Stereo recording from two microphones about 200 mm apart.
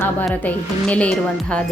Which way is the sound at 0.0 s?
10° left (ahead or behind).